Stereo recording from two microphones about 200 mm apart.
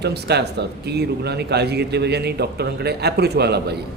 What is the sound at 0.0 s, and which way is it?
Speech, 55° right (ahead or behind).